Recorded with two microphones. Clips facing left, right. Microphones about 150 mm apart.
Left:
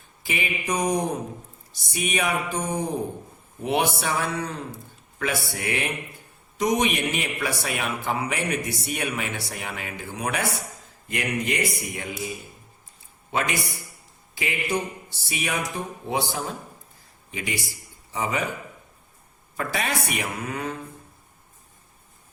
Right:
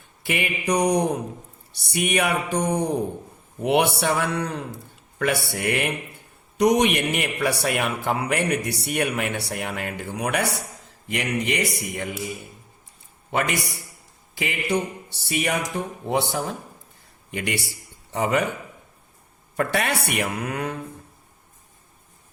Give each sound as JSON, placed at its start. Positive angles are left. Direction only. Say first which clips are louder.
{"t": 0.3, "sound": "a man's voice", "louder": "right 4 dB", "side_deg": -65}
{"t": 13.3, "sound": "a man's voice", "louder": "right 2 dB", "side_deg": -65}
{"t": 19.5, "sound": "a man's voice", "louder": "right 4 dB", "side_deg": -65}